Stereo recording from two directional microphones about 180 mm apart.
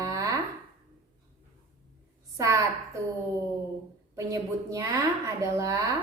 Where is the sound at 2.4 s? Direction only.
15° right (ahead or behind).